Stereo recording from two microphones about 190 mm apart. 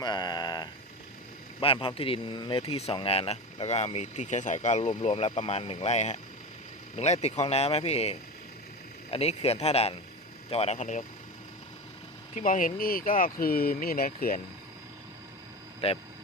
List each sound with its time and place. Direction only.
0.0 s a sound: 20° left (ahead or behind)
1.6 s speech: 30° left (ahead or behind)
12.3 s speech: 40° left (ahead or behind)
15.8 s speech: 30° left (ahead or behind)